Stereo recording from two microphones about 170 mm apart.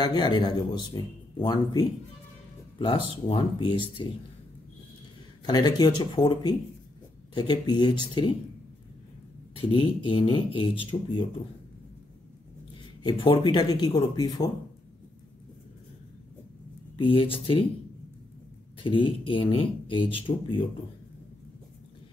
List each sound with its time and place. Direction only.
0.0 s speech: 25° left (ahead or behind)
5.4 s speech: 25° left (ahead or behind)
9.6 s speech: 30° left (ahead or behind)
13.0 s speech: 25° left (ahead or behind)
16.9 s speech: 30° left (ahead or behind)
18.8 s speech: 30° left (ahead or behind)